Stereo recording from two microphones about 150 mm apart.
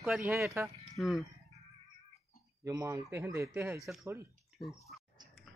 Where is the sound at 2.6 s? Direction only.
20° right (ahead or behind).